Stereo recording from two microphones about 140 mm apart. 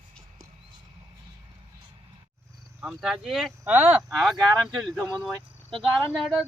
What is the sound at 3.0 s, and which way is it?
Speech, centre (ahead or behind).